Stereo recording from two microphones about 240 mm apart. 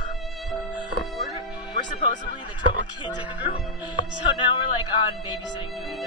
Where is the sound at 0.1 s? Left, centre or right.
Centre.